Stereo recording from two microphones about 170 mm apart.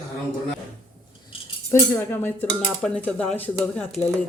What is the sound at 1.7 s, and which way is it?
Speech, 15° left (ahead or behind).